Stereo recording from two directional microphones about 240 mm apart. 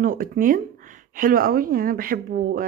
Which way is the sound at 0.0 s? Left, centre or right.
Right.